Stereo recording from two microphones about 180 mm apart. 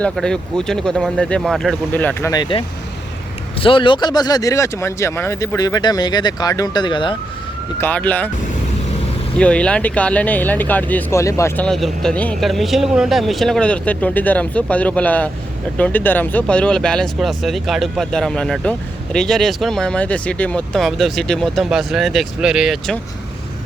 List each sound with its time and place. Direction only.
0.0 s speech: 5° left (ahead or behind)
2.3 s speech: 25° left (ahead or behind)
7.8 s speech: 10° left (ahead or behind)
9.4 s speech: 5° left (ahead or behind)